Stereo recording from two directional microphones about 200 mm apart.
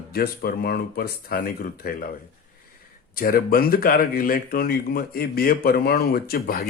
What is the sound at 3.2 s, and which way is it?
Speech, 45° left (ahead or behind).